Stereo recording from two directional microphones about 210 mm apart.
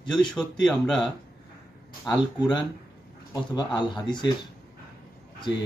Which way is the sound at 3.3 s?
20° left (ahead or behind).